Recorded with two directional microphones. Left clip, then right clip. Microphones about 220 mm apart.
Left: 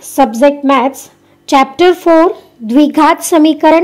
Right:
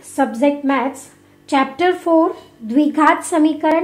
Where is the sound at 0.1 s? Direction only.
40° left (ahead or behind).